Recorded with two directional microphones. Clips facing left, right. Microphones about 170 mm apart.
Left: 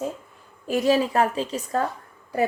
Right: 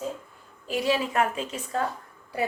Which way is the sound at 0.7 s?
45° left (ahead or behind).